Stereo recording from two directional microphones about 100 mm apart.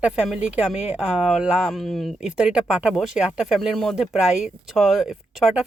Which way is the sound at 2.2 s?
10° right (ahead or behind).